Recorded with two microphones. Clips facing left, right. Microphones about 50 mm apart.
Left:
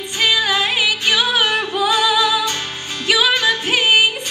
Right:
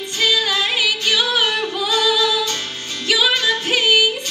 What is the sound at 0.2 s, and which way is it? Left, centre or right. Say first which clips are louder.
Music: left 2 dB; left.